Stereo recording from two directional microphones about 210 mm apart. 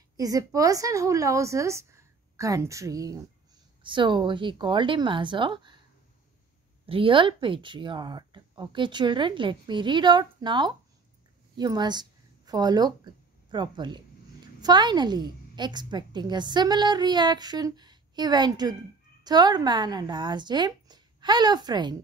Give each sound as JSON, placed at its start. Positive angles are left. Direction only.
{"t": 0.2, "sound": "a woman's voice", "side_deg": -15}
{"t": 6.9, "sound": "a woman's voice", "side_deg": -25}